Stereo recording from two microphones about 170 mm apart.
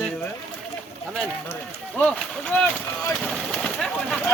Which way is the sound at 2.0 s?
5° left (ahead or behind).